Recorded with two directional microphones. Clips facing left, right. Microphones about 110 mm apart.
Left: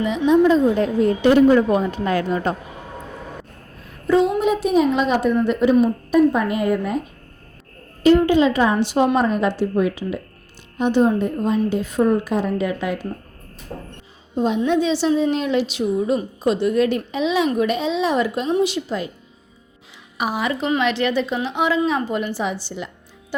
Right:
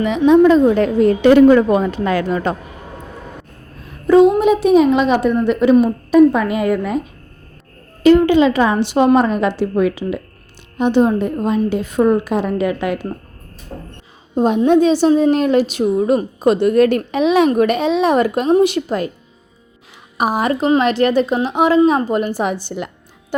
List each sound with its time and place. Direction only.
0.0 s a woman's voice: 70° right (ahead or behind); by 2.6 s 90° right
4.0 s a woman's voice: 60° right (ahead or behind); by 6.9 s 90° right
8.0 s a woman's voice: 85° right; by 13.0 s 65° right (ahead or behind)
14.3 s a woman's voice: 50° right (ahead or behind)
20.1 s a woman's voice: 45° right (ahead or behind)